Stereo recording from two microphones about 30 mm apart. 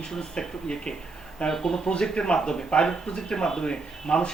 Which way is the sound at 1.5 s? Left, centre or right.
Centre.